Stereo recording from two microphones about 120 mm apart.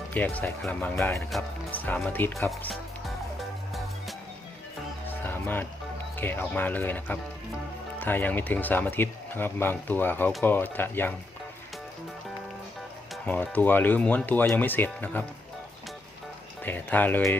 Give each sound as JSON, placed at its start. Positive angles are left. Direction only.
{"t": 0.1, "sound": "speech", "side_deg": 15}
{"t": 1.3, "sound": "speech", "side_deg": 0}
{"t": 1.7, "sound": "speech", "side_deg": 15}
{"t": 5.0, "sound": "music", "side_deg": 15}
{"t": 6.1, "sound": "speech", "side_deg": 15}
{"t": 13.2, "sound": "speech", "side_deg": 15}
{"t": 16.6, "sound": "speech", "side_deg": 15}